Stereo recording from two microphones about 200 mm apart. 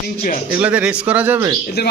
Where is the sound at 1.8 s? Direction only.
55° left (ahead or behind).